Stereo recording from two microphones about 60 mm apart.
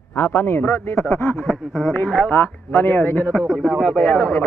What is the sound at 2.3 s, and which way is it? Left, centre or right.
Speech, left.